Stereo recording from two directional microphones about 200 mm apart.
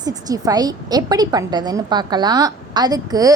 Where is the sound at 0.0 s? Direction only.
20° right (ahead or behind).